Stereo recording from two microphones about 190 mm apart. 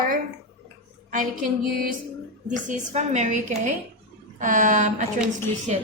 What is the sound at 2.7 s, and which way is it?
A woman's voice, 40° right (ahead or behind).